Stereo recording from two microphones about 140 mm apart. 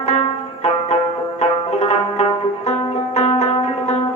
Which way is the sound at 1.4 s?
55° left (ahead or behind).